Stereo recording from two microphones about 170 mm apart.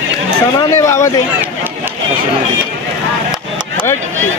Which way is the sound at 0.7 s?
15° left (ahead or behind).